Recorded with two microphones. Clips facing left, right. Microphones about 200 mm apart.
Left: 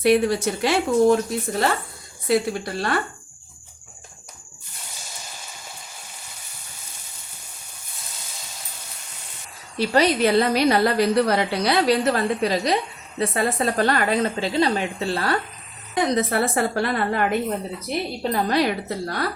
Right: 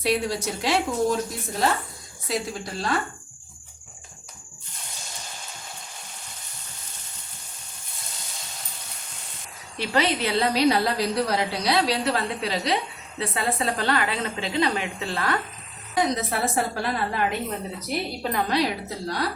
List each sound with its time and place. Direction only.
0.0 s speech: 55° left (ahead or behind)
9.7 s a woman's voice: 35° left (ahead or behind)
16.0 s speech: 60° left (ahead or behind)
18.2 s a woman's voice: 35° left (ahead or behind)
18.5 s speech: 55° left (ahead or behind)